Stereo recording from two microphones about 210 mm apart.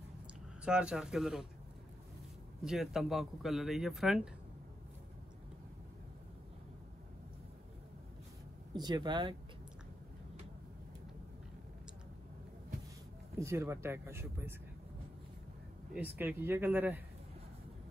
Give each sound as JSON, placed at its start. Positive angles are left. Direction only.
{"t": 0.7, "sound": "a man's voice", "side_deg": -5}
{"t": 2.6, "sound": "a man's voice", "side_deg": 0}
{"t": 8.7, "sound": "speech", "side_deg": -20}
{"t": 13.4, "sound": "speech", "side_deg": -10}
{"t": 15.9, "sound": "speech", "side_deg": -10}